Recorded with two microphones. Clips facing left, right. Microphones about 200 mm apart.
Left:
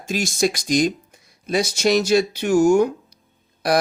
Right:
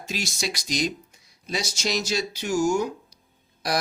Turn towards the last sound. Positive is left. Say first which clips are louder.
# left 7 dB
turn(degrees=60)  # may be behind; listen again after turning